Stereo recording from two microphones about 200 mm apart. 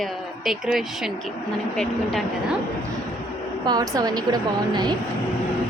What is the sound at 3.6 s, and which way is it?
A woman's voice, 20° right (ahead or behind).